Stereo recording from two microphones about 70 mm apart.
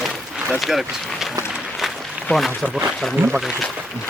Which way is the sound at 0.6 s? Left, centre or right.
Centre.